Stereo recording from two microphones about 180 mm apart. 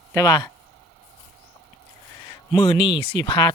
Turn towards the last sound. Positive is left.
turn(degrees=25)  # may be behind; listen again after turning